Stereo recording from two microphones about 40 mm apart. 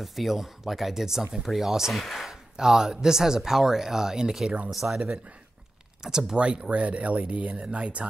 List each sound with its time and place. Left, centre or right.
0.0 s speech: centre
2.0 s speech: centre
2.5 s speech: centre
6.0 s speech: centre
6.3 s speech: right